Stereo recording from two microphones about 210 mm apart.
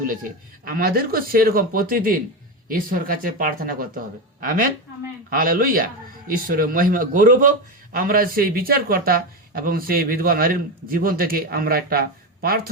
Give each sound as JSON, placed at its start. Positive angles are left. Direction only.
{"t": 0.6, "sound": "a man's voice", "side_deg": -45}